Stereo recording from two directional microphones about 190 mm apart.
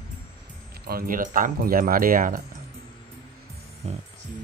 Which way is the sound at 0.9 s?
50° right (ahead or behind).